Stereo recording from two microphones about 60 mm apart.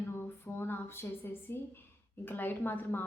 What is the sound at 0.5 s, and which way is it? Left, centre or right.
A woman's voice, left.